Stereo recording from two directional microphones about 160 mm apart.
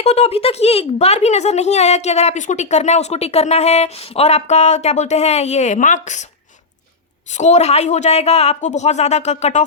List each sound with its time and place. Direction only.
0.0 s speech: 40° left (ahead or behind)
7.3 s speech: 45° left (ahead or behind)